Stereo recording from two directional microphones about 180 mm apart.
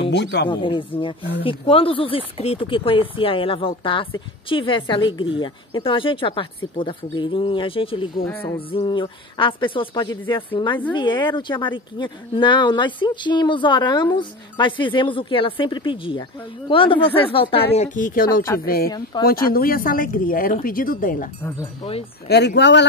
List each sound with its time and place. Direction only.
0.1 s speech: 75° left (ahead or behind)
0.5 s a woman's voice: 25° left (ahead or behind)
17.7 s speech: 45° left (ahead or behind)
18.5 s a woman's voice: 15° left (ahead or behind)
19.2 s speech: 55° left (ahead or behind)
22.6 s speech: 75° left (ahead or behind)